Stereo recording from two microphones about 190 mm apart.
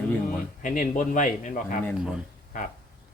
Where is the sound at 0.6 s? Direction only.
40° left (ahead or behind).